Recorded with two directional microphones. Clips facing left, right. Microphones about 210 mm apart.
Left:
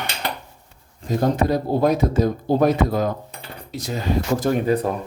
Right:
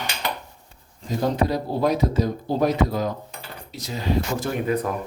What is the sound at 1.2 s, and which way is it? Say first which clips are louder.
Speech: left 3 dB; 50° left (ahead or behind).